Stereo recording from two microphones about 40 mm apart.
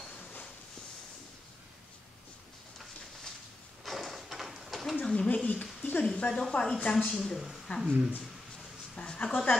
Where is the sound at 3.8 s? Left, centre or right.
Centre.